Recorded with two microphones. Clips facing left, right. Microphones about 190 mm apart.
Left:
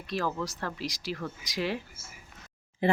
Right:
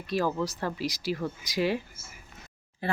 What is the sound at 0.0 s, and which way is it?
Speech, 5° right (ahead or behind).